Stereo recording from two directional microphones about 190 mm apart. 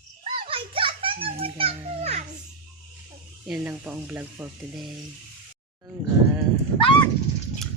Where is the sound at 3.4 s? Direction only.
5° right (ahead or behind).